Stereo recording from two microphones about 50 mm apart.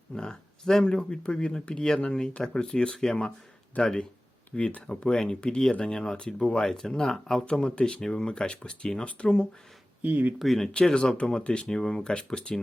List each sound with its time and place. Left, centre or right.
0.1 s speech: centre
10.0 s speech: right
10.3 s speech: centre
10.7 s speech: left